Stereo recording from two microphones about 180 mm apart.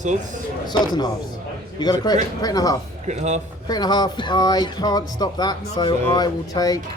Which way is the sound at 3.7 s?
20° left (ahead or behind).